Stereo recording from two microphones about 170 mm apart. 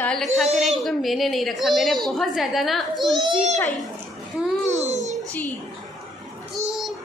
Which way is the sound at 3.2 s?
35° right (ahead or behind).